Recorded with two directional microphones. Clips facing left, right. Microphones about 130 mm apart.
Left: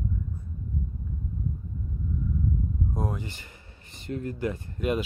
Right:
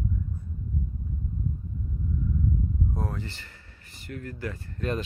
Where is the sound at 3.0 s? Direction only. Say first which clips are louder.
Left 2 dB; 15° left (ahead or behind).